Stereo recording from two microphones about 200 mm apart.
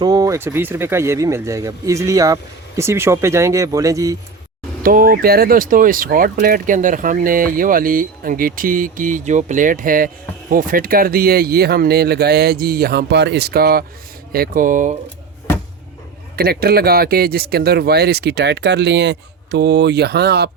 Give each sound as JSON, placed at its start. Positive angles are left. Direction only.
{"t": 0.0, "sound": "speech", "side_deg": -20}
{"t": 4.8, "sound": "speech", "side_deg": -45}
{"t": 16.3, "sound": "speech", "side_deg": -50}